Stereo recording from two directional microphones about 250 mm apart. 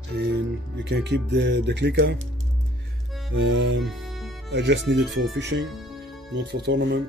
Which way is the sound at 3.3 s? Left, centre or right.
Right.